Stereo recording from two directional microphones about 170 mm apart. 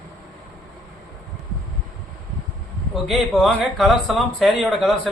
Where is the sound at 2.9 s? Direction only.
Centre (ahead or behind).